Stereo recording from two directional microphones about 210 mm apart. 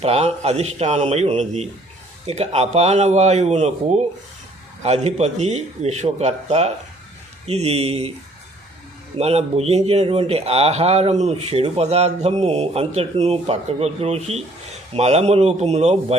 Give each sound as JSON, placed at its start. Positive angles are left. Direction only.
{"t": 0.0, "sound": "a man's voice", "side_deg": -30}
{"t": 9.1, "sound": "a man's voice", "side_deg": -30}